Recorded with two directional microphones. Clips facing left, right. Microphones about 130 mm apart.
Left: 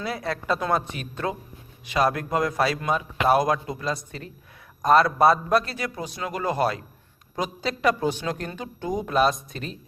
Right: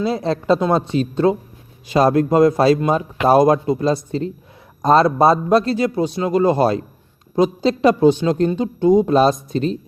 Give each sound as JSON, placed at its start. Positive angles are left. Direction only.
{"t": 0.0, "sound": "a man's voice", "side_deg": -25}